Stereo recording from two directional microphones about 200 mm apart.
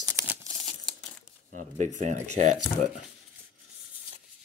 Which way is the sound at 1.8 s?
35° right (ahead or behind).